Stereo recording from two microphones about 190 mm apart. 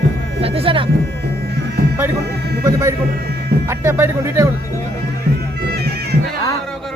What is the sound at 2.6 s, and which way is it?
Speech, 15° right (ahead or behind).